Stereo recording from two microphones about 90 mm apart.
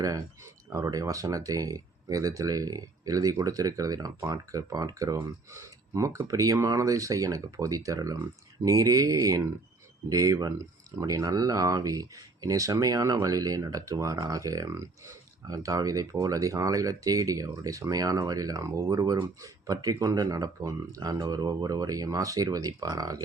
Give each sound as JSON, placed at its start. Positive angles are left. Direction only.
{"t": 0.7, "sound": "speech", "side_deg": -35}